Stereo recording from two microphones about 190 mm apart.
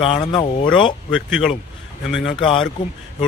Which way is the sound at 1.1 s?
Centre (ahead or behind).